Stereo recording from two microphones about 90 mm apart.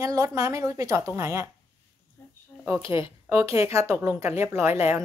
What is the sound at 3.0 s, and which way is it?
A woman's voice, 35° right (ahead or behind).